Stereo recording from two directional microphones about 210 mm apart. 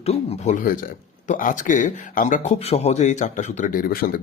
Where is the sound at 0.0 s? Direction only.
30° left (ahead or behind).